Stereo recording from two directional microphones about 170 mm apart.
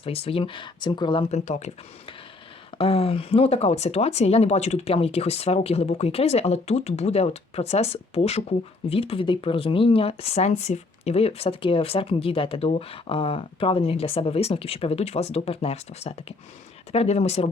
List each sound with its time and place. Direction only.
0.0 s speech: 35° left (ahead or behind)
2.7 s speech: 35° left (ahead or behind)